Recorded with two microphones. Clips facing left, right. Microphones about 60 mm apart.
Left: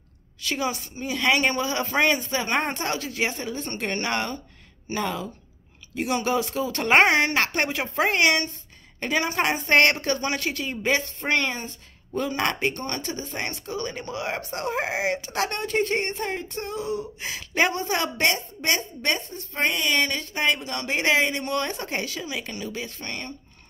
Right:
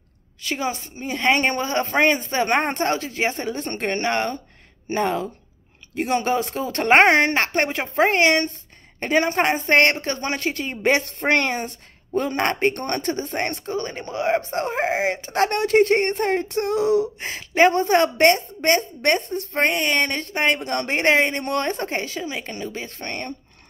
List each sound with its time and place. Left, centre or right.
0.4 s speech: right
2.4 s speech: right
3.5 s a woman's voice: right
3.8 s speech: right
10.8 s speech: right
12.2 s a woman's voice: right
13.7 s speech: right
15.4 s speech: right
17.4 s a woman's voice: right
17.7 s a woman's voice: right